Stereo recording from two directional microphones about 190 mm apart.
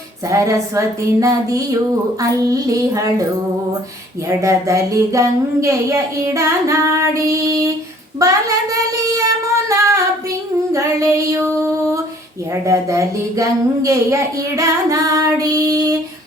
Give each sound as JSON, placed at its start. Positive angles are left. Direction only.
{"t": 0.3, "sound": "speech", "side_deg": -15}
{"t": 4.3, "sound": "a child's voice", "side_deg": -15}
{"t": 9.6, "sound": "female singing", "side_deg": -15}
{"t": 10.7, "sound": "speech", "side_deg": -15}
{"t": 12.6, "sound": "speech", "side_deg": -15}